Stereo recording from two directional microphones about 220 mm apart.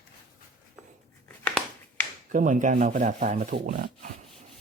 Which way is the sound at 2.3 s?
35° right (ahead or behind).